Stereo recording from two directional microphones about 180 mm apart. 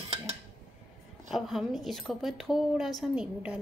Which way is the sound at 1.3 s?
Centre (ahead or behind).